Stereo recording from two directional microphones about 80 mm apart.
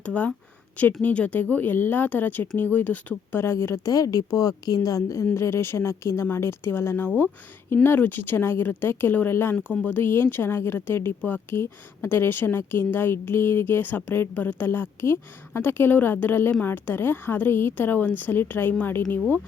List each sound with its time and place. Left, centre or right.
0.0 s speech: centre
3.4 s speech: left
3.8 s a woman's voice: left
5.2 s speech: left